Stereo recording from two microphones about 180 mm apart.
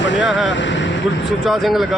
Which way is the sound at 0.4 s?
90° left.